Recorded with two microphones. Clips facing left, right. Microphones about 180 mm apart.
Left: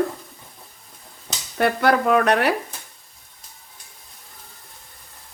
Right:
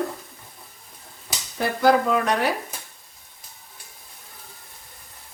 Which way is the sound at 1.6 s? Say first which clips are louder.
Even; 65° left (ahead or behind).